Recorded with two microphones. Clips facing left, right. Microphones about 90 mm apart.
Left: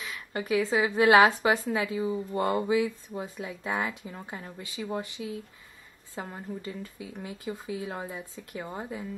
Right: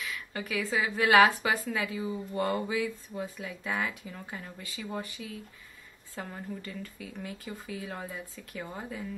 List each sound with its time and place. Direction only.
0.0 s a woman's voice: 25° left (ahead or behind)